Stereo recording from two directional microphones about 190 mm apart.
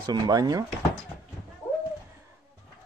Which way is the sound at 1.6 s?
10° left (ahead or behind).